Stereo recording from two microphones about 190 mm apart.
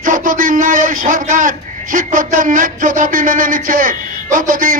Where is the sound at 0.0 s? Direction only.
45° right (ahead or behind).